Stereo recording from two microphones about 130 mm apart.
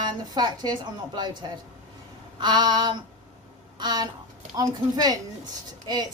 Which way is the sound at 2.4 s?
35° right (ahead or behind).